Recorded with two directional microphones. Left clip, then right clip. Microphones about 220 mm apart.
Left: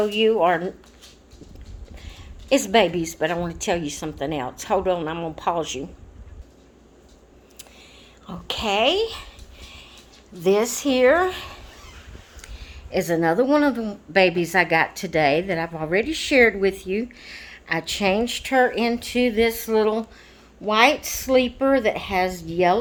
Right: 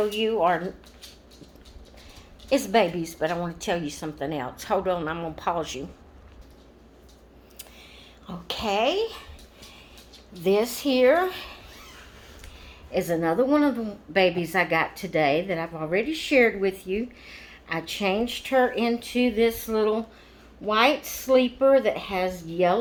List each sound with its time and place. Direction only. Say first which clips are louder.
0.1 s speech: left 4 dB; 45° left (ahead or behind)
2.5 s a woman's voice: left 4 dB; 30° left (ahead or behind)
8.3 s a woman's voice: left 3 dB; 20° left (ahead or behind)
10.4 s a woman's voice: left 3 dB; 30° left (ahead or behind)
12.4 s speech: left 3 dB; 55° left (ahead or behind)